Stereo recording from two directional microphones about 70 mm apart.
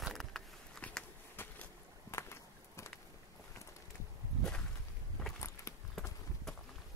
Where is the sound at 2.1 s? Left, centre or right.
Left.